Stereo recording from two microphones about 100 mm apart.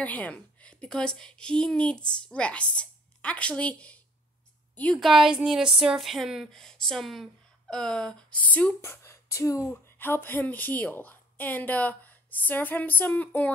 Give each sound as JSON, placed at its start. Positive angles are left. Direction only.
{"t": 0.0, "sound": "a woman's voice", "side_deg": 15}
{"t": 5.0, "sound": "a woman's voice", "side_deg": -5}
{"t": 8.9, "sound": "a woman's voice", "side_deg": 30}